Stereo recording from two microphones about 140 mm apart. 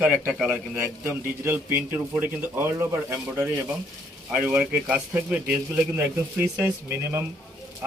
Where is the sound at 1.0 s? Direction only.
15° right (ahead or behind).